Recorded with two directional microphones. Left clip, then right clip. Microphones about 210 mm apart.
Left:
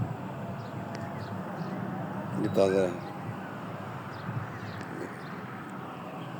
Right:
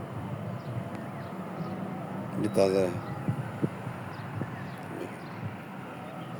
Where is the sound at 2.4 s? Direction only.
5° right (ahead or behind).